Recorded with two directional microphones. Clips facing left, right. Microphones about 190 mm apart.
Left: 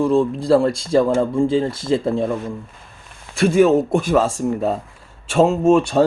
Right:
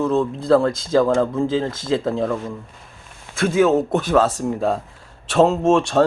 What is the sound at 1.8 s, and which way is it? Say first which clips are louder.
Speech: left 2 dB; 10° left (ahead or behind).